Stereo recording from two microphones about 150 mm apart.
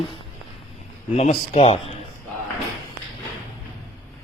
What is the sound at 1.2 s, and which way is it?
Speech, 50° left (ahead or behind).